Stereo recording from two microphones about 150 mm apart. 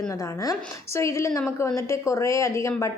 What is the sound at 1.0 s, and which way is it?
A woman's voice, 20° left (ahead or behind).